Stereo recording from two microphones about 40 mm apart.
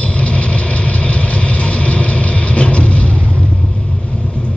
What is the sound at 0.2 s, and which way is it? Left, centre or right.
Vehicle, left.